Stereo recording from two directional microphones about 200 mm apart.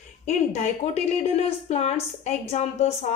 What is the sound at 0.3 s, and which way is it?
A woman's voice, 35° left (ahead or behind).